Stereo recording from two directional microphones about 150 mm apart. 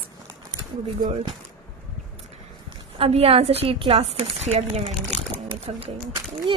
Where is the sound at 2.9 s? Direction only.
45° right (ahead or behind).